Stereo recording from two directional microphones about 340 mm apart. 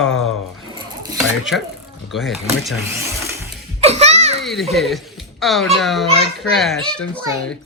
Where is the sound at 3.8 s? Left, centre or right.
Centre.